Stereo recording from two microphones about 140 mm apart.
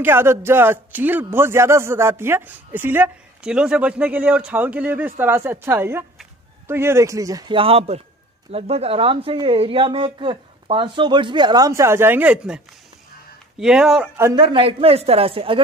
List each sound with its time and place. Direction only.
0.0 s speech: 15° right (ahead or behind)
7.5 s a man's voice: 45° right (ahead or behind); by 14.0 s 5° right (ahead or behind)
14.3 s speech: 35° right (ahead or behind)